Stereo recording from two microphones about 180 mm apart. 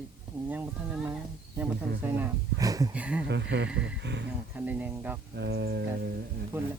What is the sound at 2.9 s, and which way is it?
Speech, 5° right (ahead or behind).